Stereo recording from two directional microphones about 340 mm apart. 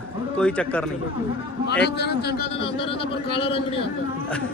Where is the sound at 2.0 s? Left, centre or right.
Left.